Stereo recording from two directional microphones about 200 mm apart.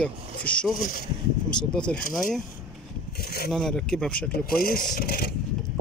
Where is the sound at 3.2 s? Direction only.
50° left (ahead or behind).